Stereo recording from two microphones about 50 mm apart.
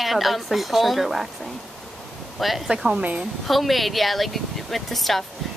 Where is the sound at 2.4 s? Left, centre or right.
Centre.